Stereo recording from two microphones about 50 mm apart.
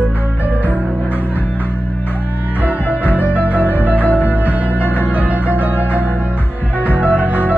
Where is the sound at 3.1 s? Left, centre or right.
Right.